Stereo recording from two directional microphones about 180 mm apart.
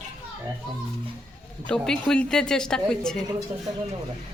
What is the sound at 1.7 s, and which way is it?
Speech, 5° left (ahead or behind).